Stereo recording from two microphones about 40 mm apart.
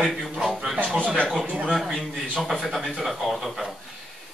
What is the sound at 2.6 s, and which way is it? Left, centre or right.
Speech, centre.